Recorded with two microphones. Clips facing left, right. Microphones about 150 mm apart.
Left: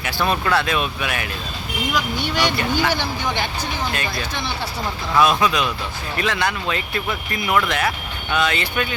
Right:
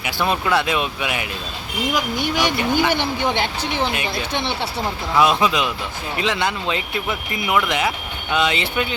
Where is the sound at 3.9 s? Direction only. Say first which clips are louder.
Right 2 dB; 15° right (ahead or behind).